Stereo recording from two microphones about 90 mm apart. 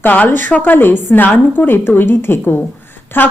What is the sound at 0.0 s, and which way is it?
Speech, 20° left (ahead or behind).